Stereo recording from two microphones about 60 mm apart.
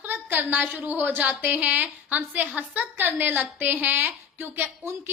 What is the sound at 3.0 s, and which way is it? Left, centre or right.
A woman's voice, right.